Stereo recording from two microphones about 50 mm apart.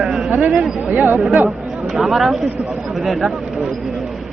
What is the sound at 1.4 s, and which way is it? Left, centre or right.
Speech, centre.